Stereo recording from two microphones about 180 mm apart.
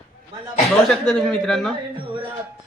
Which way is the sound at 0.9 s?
5° left (ahead or behind).